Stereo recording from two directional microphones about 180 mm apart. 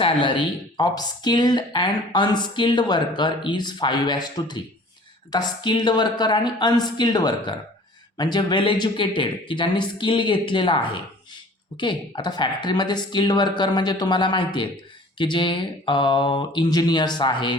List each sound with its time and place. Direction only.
0.0 s speech: 30° left (ahead or behind)